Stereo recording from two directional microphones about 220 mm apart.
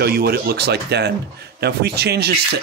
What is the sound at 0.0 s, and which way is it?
Speech, 45° right (ahead or behind).